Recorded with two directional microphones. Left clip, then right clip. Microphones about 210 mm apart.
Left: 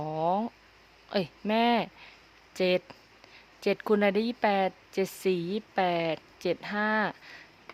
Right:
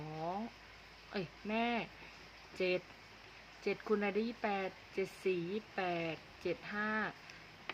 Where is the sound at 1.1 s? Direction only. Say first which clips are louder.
Left 11 dB; 55° left (ahead or behind).